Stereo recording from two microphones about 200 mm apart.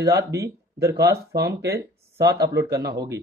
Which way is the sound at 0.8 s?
50° right (ahead or behind).